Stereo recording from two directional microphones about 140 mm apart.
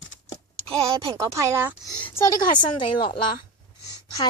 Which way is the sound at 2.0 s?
20° left (ahead or behind).